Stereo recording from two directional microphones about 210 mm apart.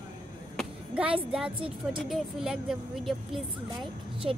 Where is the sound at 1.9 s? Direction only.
Centre (ahead or behind).